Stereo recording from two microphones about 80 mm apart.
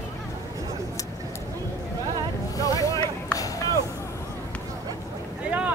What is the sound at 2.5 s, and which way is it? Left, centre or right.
Boat, left.